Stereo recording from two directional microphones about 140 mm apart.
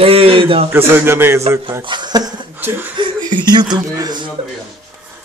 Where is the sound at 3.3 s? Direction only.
30° right (ahead or behind).